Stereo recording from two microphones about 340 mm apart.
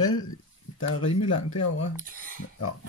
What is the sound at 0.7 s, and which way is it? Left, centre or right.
Speech, left.